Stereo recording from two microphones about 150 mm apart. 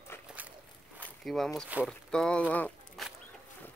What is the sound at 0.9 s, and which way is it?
Walk, 5° left (ahead or behind).